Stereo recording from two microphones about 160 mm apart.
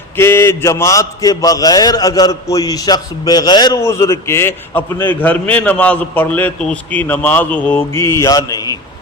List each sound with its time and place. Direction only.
0.2 s a man's voice: 15° left (ahead or behind)